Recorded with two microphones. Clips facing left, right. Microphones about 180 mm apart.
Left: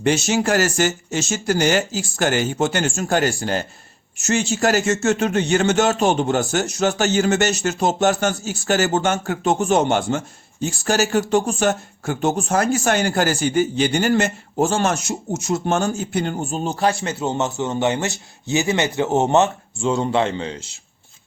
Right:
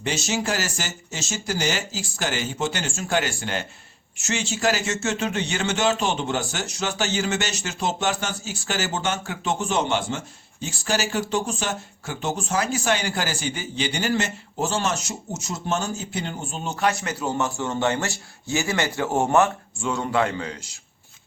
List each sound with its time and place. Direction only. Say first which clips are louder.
0.0 s speech: left 7 dB; 55° left (ahead or behind); by 20.7 s 25° left (ahead or behind)